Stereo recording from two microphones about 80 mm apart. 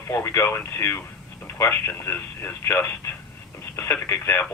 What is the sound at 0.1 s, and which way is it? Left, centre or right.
Speech, left.